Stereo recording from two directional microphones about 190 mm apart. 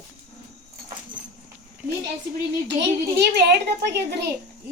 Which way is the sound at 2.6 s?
60° right (ahead or behind).